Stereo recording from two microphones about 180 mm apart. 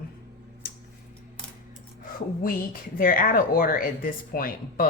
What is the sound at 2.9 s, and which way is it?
Speech, 50° left (ahead or behind).